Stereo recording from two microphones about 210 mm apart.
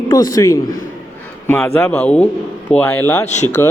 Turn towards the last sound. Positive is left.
turn(degrees=35)  # may be behind; listen again after turning